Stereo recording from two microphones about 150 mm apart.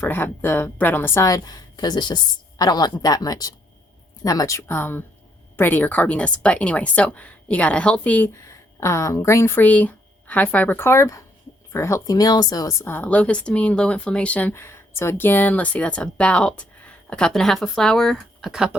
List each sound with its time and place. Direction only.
0.0 s speech: 15° left (ahead or behind); by 18.8 s 5° right (ahead or behind)